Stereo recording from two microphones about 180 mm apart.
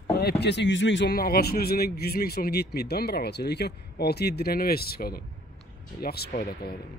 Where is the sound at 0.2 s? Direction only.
65° left (ahead or behind).